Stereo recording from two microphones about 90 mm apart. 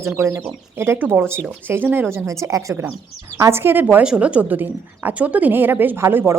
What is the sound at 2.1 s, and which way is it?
A woman's voice, 35° right (ahead or behind).